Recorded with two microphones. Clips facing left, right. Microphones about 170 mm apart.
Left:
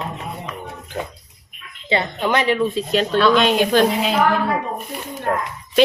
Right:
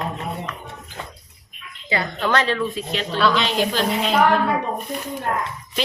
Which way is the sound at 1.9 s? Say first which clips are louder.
Left 2 dB; 20° left (ahead or behind).